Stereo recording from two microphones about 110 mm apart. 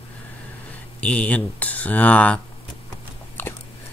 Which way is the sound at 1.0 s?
10° left (ahead or behind).